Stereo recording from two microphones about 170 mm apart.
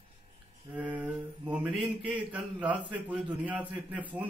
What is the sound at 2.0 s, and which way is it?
A man's voice, 10° right (ahead or behind).